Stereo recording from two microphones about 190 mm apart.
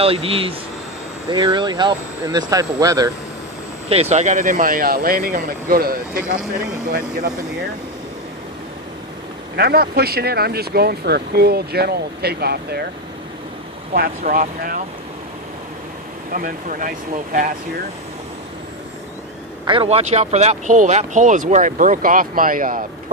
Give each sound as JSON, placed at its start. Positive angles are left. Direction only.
{"t": 0.0, "sound": "speech", "side_deg": -30}
{"t": 3.8, "sound": "speech", "side_deg": -35}
{"t": 9.6, "sound": "speech", "side_deg": -55}
{"t": 13.9, "sound": "speech", "side_deg": -50}
{"t": 16.3, "sound": "speech", "side_deg": -45}
{"t": 19.6, "sound": "speech", "side_deg": -25}